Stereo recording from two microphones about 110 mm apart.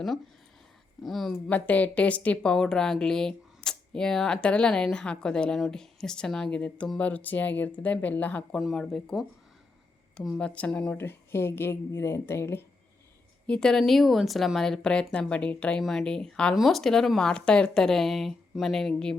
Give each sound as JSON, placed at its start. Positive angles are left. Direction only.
{"t": 1.0, "sound": "speech", "side_deg": 0}
{"t": 1.5, "sound": "a woman's voice", "side_deg": 15}
{"t": 8.5, "sound": "a woman's voice", "side_deg": 0}
{"t": 13.5, "sound": "a woman's voice", "side_deg": 5}